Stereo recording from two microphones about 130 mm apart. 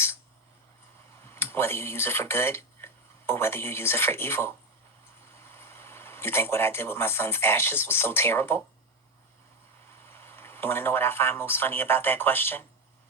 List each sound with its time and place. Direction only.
1.2 s speech: 20° left (ahead or behind)
10.1 s speech: 15° left (ahead or behind)